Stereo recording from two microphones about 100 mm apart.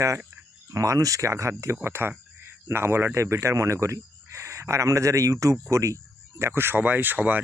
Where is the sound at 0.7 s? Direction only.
35° right (ahead or behind).